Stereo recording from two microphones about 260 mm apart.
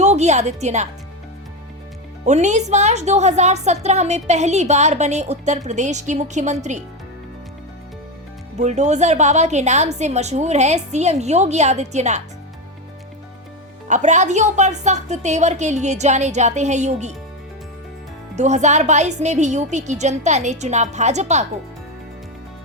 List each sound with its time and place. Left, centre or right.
0.0 s speech: right
2.2 s a woman's voice: right
8.5 s a woman's voice: right
13.8 s a woman's voice: right
18.3 s a woman's voice: right